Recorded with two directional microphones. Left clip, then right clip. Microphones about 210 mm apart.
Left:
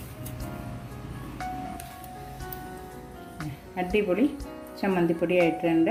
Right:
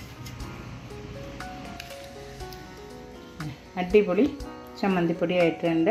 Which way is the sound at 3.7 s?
25° right (ahead or behind).